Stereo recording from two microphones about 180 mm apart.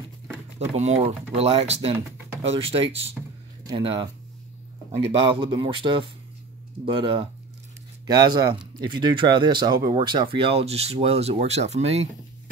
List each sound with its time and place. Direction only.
0.7 s speech: 35° right (ahead or behind)